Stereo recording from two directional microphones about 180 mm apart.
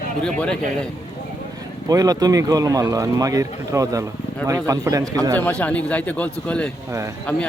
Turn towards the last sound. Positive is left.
turn(degrees=10)  # may be behind; listen again after turning